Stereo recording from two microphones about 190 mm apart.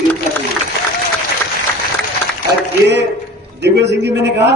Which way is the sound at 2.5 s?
65° right (ahead or behind).